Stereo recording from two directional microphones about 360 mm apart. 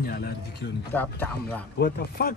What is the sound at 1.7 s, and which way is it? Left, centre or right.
Speech, left.